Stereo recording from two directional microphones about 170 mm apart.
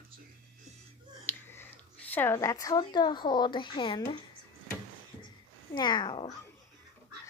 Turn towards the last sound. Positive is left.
turn(degrees=25)  # may be behind; listen again after turning